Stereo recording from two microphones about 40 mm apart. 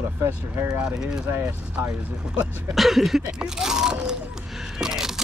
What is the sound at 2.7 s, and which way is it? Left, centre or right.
Speech, centre.